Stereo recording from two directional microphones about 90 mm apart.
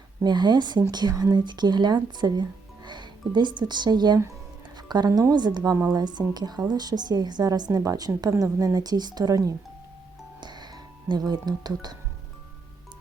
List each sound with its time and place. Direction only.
0.2 s a woman's voice: 55° right (ahead or behind)
10.4 s music: 55° right (ahead or behind)
11.1 s speech: 50° right (ahead or behind)